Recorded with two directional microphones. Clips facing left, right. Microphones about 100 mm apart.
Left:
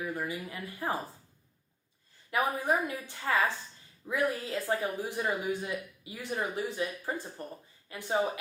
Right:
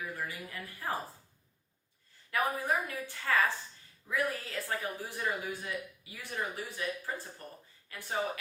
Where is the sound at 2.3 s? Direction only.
20° left (ahead or behind).